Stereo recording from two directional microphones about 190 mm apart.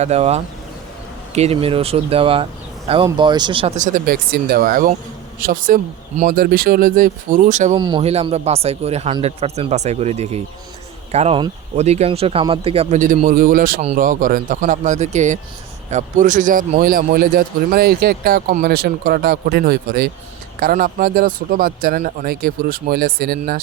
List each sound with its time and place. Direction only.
0.0 s speech: 35° right (ahead or behind)
3.8 s a man's voice: 40° right (ahead or behind)
7.8 s a man's voice: 25° right (ahead or behind); by 23.4 s 50° right (ahead or behind)